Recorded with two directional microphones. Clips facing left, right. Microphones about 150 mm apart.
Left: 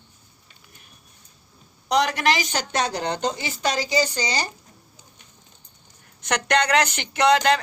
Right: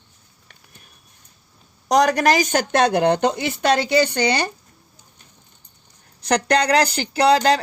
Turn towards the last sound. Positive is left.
turn(degrees=-35)  # may be behind; listen again after turning